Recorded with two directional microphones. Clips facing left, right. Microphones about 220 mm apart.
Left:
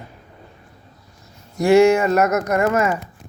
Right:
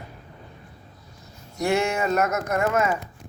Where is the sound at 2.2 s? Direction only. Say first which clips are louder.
Left 6 dB; 65° left (ahead or behind).